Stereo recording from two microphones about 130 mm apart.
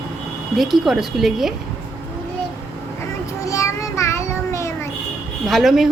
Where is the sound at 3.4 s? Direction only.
25° left (ahead or behind).